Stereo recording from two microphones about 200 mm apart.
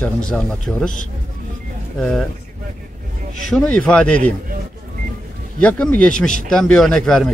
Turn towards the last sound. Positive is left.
turn(degrees=5)  # may be behind; listen again after turning